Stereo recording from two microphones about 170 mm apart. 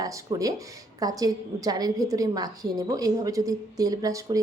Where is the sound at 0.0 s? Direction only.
20° right (ahead or behind).